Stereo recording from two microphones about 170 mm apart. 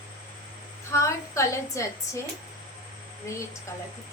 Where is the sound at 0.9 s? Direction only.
15° left (ahead or behind).